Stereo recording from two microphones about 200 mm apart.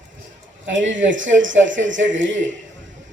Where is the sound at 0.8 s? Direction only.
70° right (ahead or behind).